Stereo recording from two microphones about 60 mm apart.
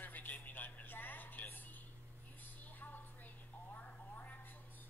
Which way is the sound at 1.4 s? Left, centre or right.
Left.